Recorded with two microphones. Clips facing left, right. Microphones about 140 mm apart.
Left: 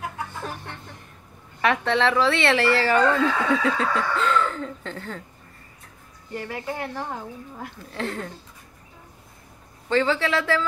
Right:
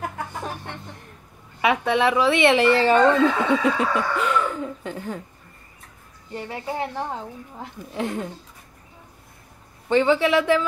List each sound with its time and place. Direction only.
1.6 s speech: 10° right (ahead or behind)
6.3 s speech: 25° right (ahead or behind)
9.8 s speech: 15° right (ahead or behind)